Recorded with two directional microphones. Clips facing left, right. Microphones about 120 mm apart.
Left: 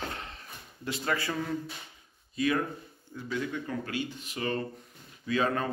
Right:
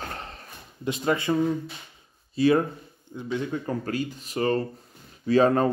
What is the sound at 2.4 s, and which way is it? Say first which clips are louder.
Speech: right 8 dB; 30° right (ahead or behind).